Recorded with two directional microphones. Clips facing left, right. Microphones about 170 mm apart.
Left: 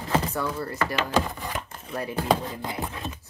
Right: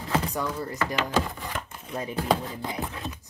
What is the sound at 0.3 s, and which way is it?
Speech, 15° right (ahead or behind).